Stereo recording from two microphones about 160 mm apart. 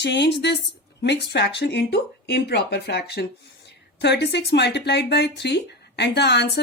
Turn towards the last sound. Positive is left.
turn(degrees=90)